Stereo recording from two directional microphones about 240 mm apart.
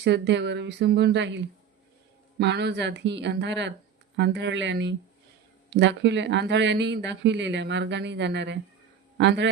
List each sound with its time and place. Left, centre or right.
0.0 s speech: right
2.4 s speech: right